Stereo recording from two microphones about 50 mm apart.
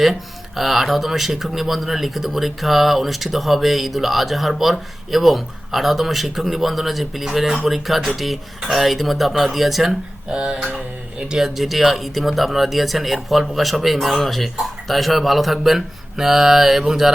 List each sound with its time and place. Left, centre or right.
0.0 s speech: centre
10.2 s a sound: centre
10.8 s speech: centre